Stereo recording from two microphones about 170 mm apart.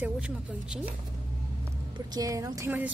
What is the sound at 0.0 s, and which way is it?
Speech, 10° right (ahead or behind).